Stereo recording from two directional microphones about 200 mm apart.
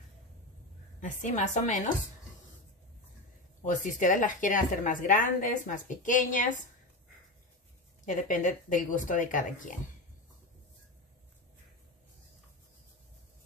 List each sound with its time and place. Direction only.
1.0 s a woman's voice: 35° left (ahead or behind)
3.6 s a woman's voice: 40° left (ahead or behind)
8.0 s a woman's voice: 40° left (ahead or behind)